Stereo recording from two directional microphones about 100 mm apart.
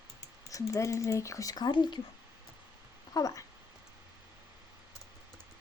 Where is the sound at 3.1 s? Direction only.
35° left (ahead or behind).